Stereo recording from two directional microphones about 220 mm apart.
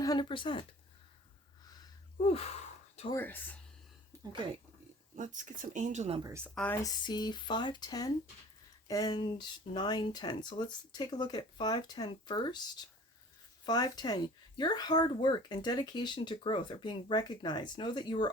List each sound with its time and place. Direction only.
0.0 s speech: 20° left (ahead or behind)
1.7 s a sound: 20° left (ahead or behind)
3.2 s speech: 10° left (ahead or behind)
4.1 s a sound: 10° right (ahead or behind)
5.1 s speech: 35° right (ahead or behind)
6.2 s a woman's voice: 10° right (ahead or behind)
6.5 s speech: 5° left (ahead or behind)
13.7 s speech: 15° left (ahead or behind)